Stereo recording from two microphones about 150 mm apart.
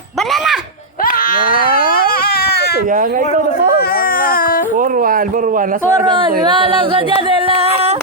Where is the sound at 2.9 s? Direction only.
65° right (ahead or behind).